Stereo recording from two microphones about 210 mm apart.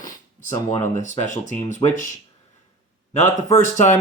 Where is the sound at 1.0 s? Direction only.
35° left (ahead or behind).